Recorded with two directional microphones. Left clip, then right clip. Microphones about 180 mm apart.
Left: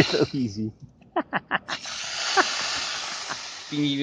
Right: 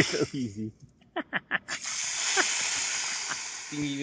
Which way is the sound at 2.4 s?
5° left (ahead or behind).